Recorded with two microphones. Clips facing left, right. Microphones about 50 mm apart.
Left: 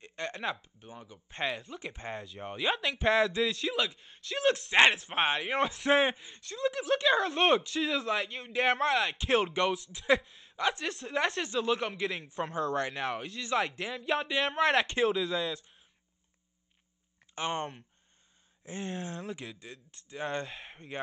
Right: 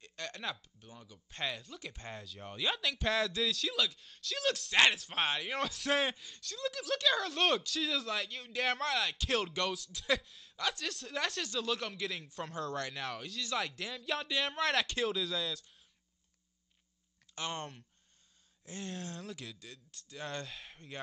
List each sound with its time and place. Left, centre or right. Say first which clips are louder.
0.0 s speech: left 6 dB; left
2.4 s speech: left 4 dB; left
2.7 s speech: left 6 dB; centre
17.4 s speech: left 6 dB; left